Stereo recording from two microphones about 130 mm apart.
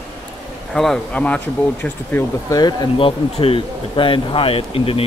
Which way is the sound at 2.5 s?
30° left (ahead or behind).